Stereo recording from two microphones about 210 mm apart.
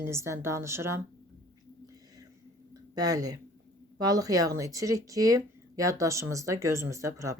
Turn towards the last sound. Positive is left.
turn(degrees=-15)  # may be behind; listen again after turning